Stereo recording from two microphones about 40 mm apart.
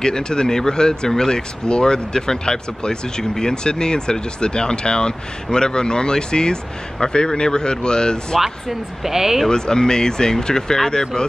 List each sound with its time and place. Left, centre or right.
0.0 s speech: centre
8.4 s speech: centre
9.5 s speech: centre